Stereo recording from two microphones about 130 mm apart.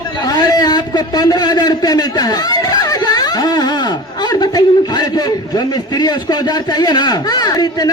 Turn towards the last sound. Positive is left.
turn(degrees=30)  # may be behind; listen again after turning